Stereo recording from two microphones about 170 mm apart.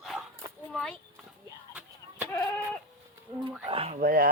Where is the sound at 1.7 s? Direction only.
10° right (ahead or behind).